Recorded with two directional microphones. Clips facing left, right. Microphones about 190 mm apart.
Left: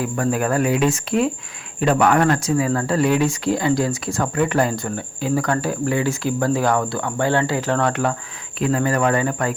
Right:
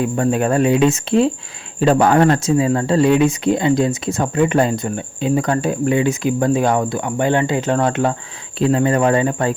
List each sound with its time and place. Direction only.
0.0 s speech: 25° right (ahead or behind)